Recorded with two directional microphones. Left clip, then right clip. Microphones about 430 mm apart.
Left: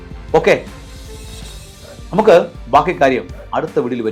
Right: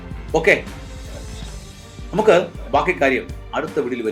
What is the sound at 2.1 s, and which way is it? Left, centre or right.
Speech, left.